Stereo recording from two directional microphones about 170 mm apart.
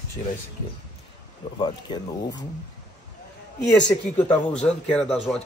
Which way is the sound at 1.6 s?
25° left (ahead or behind).